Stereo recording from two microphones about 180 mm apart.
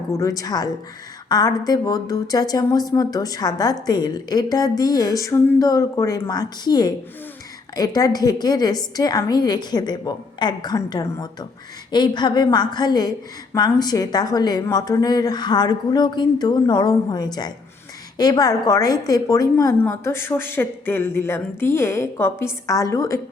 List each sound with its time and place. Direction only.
0.1 s a woman's voice: 20° left (ahead or behind)